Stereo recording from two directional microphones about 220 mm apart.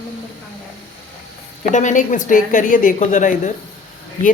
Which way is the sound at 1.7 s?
35° left (ahead or behind).